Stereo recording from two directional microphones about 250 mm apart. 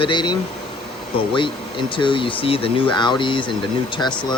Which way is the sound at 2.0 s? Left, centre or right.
Centre.